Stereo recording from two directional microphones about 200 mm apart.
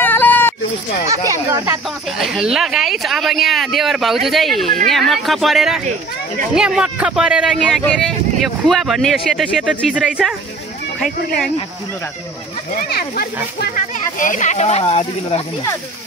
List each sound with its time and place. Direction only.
0.0 s a sound: 10° left (ahead or behind)
1.0 s speech: 15° right (ahead or behind)
2.1 s speech: centre (ahead or behind)
12.9 s speech: 50° left (ahead or behind); by 15.4 s 30° left (ahead or behind)